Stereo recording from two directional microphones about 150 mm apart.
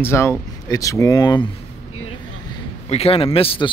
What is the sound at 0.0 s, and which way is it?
Speech, 15° left (ahead or behind).